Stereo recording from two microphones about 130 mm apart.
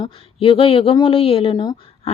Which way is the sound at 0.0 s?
45° left (ahead or behind).